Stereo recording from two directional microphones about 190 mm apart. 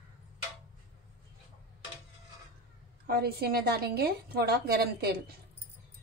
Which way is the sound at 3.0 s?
55° right (ahead or behind).